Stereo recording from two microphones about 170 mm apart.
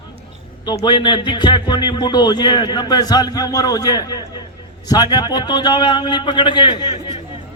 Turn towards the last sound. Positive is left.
turn(degrees=30)  # may be behind; listen again after turning